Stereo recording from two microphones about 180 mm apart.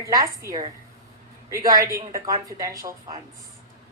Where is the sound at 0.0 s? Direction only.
15° right (ahead or behind).